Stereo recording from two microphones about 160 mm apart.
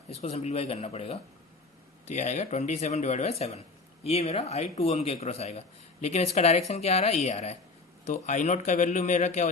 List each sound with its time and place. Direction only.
0.1 s a man's voice: 40° left (ahead or behind)